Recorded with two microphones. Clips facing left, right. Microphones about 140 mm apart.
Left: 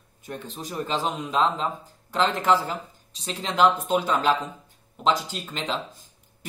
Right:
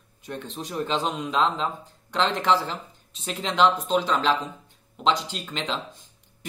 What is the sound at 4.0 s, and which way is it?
Speech, 50° left (ahead or behind).